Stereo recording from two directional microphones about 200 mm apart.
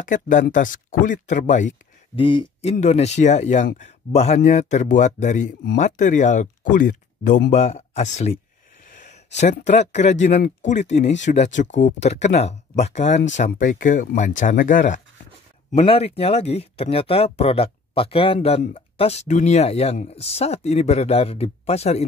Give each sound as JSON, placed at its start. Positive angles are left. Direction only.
{"t": 0.0, "sound": "speech", "side_deg": 40}
{"t": 2.1, "sound": "speech", "side_deg": 25}
{"t": 15.7, "sound": "speech", "side_deg": 25}